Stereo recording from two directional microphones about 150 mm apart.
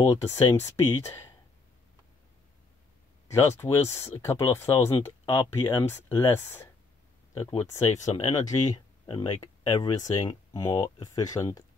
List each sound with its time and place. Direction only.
0.1 s speech: 20° left (ahead or behind)
3.3 s speech: 20° left (ahead or behind)
8.6 s speech: 30° left (ahead or behind)